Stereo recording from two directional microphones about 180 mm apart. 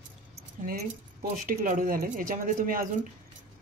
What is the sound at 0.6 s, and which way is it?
Speech, 50° right (ahead or behind).